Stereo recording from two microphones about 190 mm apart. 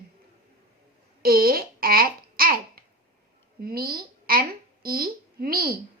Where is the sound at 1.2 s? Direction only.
50° right (ahead or behind).